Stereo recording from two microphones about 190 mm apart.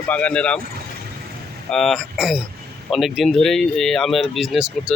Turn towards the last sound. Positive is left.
turn(degrees=0)  # may be behind; listen again after turning